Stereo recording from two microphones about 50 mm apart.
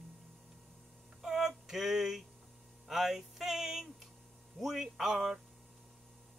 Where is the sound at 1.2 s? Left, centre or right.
Centre.